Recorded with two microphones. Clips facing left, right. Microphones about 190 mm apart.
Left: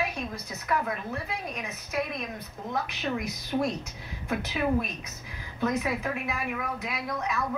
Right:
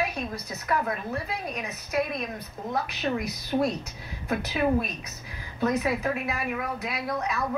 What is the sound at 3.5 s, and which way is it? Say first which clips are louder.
A woman's voice: right 3 dB; 35° right (ahead or behind).